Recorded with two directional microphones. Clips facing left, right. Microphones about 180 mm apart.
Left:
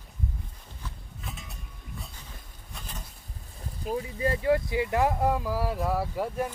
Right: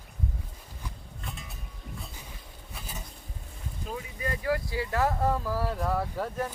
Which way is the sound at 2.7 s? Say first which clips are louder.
Even; 5° right (ahead or behind).